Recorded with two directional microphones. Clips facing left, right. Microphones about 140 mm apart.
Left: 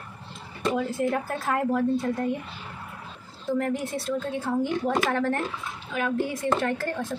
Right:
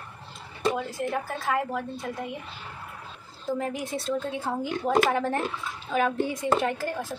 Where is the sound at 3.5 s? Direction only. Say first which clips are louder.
Left 3 dB; 15° right (ahead or behind).